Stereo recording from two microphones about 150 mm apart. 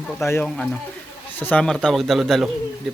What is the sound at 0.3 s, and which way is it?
Speech, 10° left (ahead or behind).